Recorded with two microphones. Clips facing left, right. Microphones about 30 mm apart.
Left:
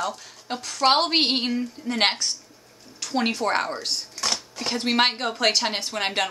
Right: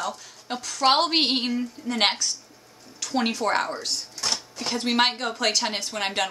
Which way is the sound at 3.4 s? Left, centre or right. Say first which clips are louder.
Right 1 dB; centre.